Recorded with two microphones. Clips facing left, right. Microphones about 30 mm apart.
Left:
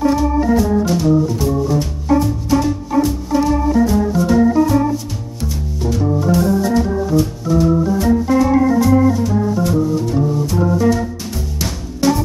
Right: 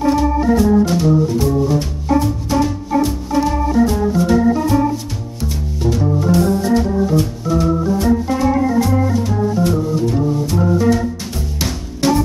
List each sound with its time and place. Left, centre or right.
0.0 s organ: centre
1.7 s music: centre
3.3 s organ: centre
5.5 s music: centre
5.9 s organ: centre
9.2 s organ: centre
10.1 s music: centre